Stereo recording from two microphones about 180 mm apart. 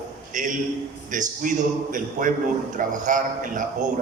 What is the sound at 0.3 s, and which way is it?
A man's voice, 45° right (ahead or behind).